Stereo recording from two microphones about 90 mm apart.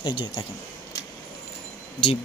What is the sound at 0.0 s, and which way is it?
Speech, 65° left (ahead or behind).